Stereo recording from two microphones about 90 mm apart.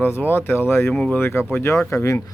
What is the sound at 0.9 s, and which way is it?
Speech, 10° left (ahead or behind).